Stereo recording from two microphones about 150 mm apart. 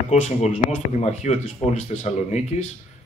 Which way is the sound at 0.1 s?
50° left (ahead or behind).